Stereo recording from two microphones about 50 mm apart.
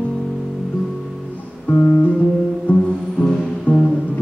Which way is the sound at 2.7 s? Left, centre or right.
Left.